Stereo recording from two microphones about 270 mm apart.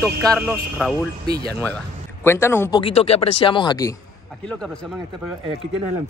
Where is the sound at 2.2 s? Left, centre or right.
Centre.